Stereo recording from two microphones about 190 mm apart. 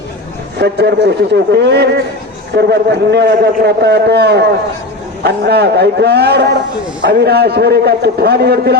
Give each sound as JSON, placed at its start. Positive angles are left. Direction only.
{"t": 0.6, "sound": "a man's voice", "side_deg": -60}